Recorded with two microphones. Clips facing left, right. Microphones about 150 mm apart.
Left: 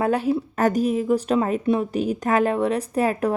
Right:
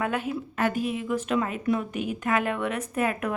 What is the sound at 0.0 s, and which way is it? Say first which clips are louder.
Speech: left 7 dB; 35° left (ahead or behind).